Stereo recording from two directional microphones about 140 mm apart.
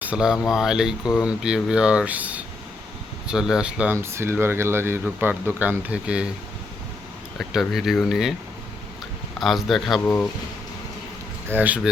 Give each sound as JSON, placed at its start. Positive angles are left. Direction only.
{"t": 0.0, "sound": "speech", "side_deg": -5}
{"t": 3.9, "sound": "speech", "side_deg": -20}
{"t": 7.3, "sound": "speech", "side_deg": 0}
{"t": 9.4, "sound": "speech", "side_deg": 0}
{"t": 11.4, "sound": "speech", "side_deg": -15}